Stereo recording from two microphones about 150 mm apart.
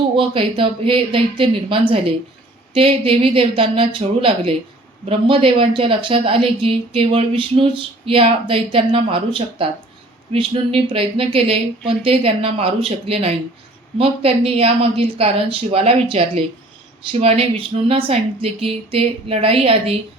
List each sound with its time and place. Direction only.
0.2 s a woman's voice: 35° right (ahead or behind)